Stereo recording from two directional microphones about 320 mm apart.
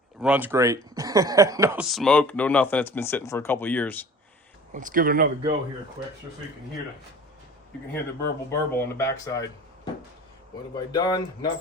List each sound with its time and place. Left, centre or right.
0.2 s speech: centre
4.7 s speech: right
8.4 s speech: centre
10.8 s speech: centre